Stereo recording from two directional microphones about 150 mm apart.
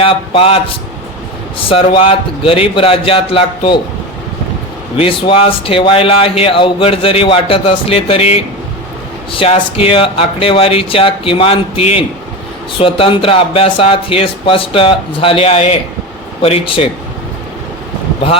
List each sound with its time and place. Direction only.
0.0 s speech: 40° left (ahead or behind)
4.9 s speech: 35° left (ahead or behind)